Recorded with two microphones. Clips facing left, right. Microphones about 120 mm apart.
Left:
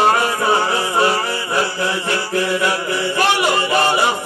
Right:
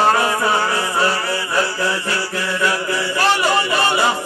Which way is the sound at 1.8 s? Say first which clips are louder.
Left 1 dB; 20° left (ahead or behind).